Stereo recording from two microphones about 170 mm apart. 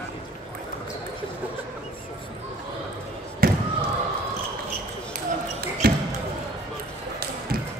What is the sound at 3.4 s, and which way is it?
Basketball bounce, 60° right (ahead or behind).